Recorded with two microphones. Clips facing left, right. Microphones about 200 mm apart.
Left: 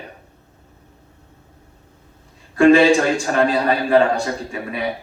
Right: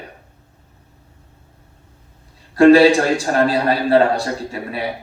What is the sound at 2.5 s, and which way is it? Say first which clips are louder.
A man's voice: right 2 dB; 35° right (ahead or behind).